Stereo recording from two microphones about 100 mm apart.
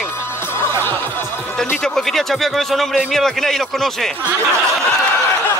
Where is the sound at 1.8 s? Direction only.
5° left (ahead or behind).